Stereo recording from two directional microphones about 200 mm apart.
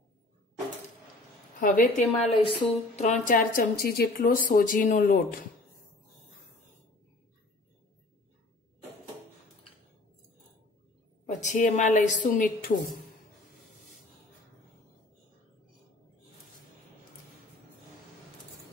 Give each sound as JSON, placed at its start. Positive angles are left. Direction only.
{"t": 1.6, "sound": "a woman's voice", "side_deg": 45}
{"t": 2.2, "sound": "a woman's voice", "side_deg": 30}
{"t": 3.5, "sound": "speech", "side_deg": 50}
{"t": 11.2, "sound": "a woman's voice", "side_deg": 40}